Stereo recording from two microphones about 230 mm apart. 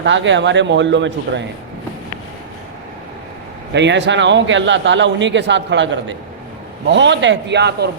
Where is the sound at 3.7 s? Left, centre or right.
Right.